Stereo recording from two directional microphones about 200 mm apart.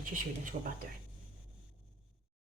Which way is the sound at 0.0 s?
40° right (ahead or behind).